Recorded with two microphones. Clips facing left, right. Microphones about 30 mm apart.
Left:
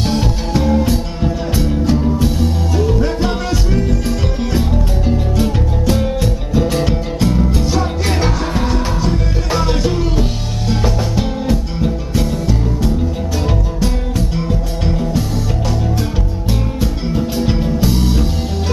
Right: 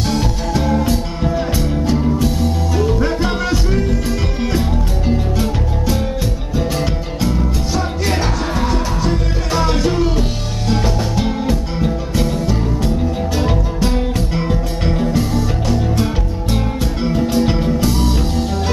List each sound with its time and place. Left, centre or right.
0.0 s music: centre
0.6 s music: centre
2.7 s music: centre
6.5 s music: centre
8.7 s music: centre
17.1 s music: centre